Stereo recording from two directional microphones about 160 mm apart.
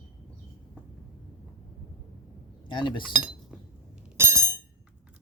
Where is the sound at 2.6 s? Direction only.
30° left (ahead or behind).